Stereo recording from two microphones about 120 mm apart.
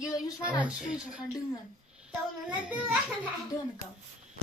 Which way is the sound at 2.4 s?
10° right (ahead or behind).